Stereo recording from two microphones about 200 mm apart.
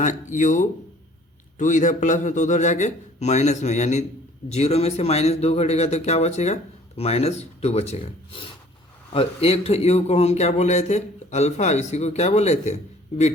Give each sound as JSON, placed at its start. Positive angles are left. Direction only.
{"t": 0.0, "sound": "a man's voice", "side_deg": 40}